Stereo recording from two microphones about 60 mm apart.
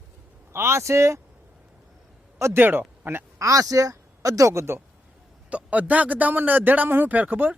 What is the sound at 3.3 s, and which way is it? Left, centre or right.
Speech, right.